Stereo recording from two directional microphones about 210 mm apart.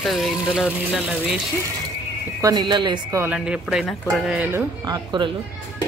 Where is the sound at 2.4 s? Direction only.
20° right (ahead or behind).